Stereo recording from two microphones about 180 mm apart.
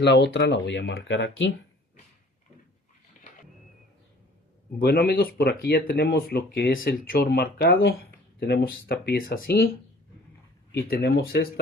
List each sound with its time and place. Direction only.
0.0 s speech: 70° left (ahead or behind); by 1.5 s 85° left
4.8 s speech: 60° left (ahead or behind)
10.8 s speech: 60° left (ahead or behind)